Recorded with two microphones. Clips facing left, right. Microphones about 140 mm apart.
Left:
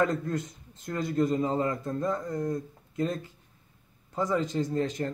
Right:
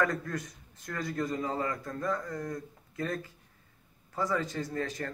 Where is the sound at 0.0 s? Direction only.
25° left (ahead or behind).